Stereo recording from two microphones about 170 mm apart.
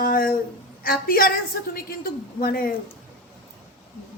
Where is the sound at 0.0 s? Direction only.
60° left (ahead or behind).